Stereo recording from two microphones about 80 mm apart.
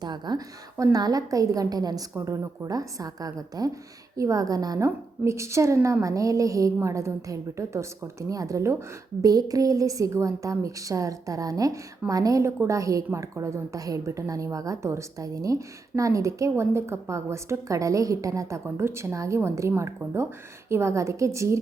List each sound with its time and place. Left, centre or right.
0.0 s a sound: right
0.9 s a woman's voice: right
2.1 s a woman's voice: right
5.2 s a woman's voice: right